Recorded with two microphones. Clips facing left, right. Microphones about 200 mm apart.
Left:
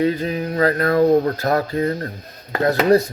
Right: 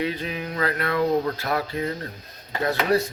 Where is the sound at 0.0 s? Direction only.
40° left (ahead or behind).